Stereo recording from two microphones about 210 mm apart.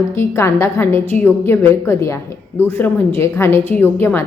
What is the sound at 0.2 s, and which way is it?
A woman's voice, 10° left (ahead or behind).